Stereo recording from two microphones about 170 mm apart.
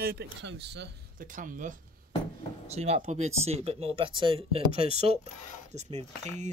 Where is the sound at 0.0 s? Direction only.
70° right (ahead or behind); by 0.8 s 90° right.